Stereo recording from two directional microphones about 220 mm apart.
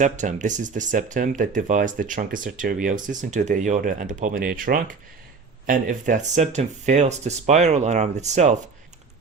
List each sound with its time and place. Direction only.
0.0 s speech: 35° right (ahead or behind)